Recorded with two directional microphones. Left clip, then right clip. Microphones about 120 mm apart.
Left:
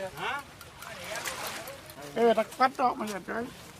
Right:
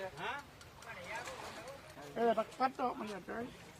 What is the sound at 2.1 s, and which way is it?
Speech, 45° left (ahead or behind).